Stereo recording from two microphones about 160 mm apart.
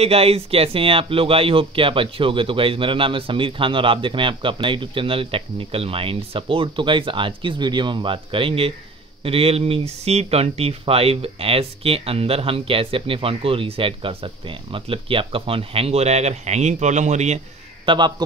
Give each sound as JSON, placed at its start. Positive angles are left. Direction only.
{"t": 0.0, "sound": "speech", "side_deg": -40}
{"t": 17.8, "sound": "a man's voice", "side_deg": -30}